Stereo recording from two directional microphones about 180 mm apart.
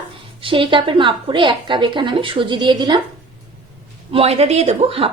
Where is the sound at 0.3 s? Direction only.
30° right (ahead or behind).